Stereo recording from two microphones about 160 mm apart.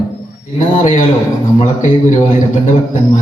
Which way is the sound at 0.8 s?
50° left (ahead or behind).